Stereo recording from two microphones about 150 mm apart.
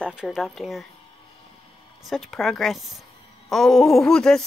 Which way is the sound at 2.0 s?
Centre (ahead or behind).